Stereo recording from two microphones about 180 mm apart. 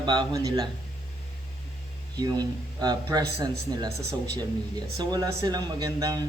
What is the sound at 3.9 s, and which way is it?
Speech, 65° right (ahead or behind).